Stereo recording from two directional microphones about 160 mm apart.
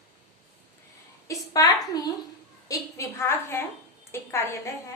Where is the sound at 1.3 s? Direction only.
20° left (ahead or behind).